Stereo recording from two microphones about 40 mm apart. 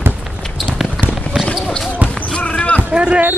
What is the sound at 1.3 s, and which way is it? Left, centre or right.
Basketball bounce, centre.